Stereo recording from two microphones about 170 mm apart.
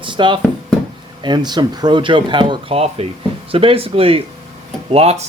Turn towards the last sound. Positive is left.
turn(degrees=-40)  # may be behind; listen again after turning